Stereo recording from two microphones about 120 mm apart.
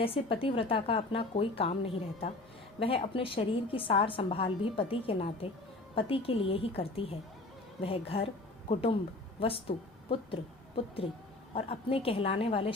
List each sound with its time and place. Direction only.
0.0 s a woman's voice: 50° left (ahead or behind)
11.5 s a woman's voice: 55° left (ahead or behind)